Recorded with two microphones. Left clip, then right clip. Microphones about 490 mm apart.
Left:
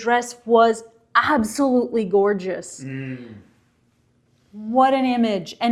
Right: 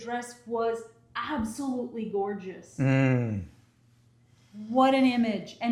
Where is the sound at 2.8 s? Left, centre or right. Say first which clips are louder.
Right 8 dB; right.